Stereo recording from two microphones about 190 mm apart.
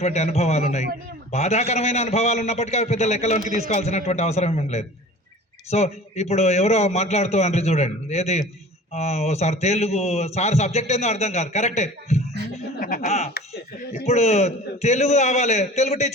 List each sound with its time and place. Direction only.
0.0 s a man's voice: 35° left (ahead or behind)
12.5 s chuckle: 40° left (ahead or behind)
14.0 s a man's voice: 35° left (ahead or behind)